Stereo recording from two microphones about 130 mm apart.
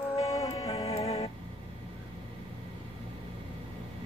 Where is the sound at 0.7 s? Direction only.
50° left (ahead or behind).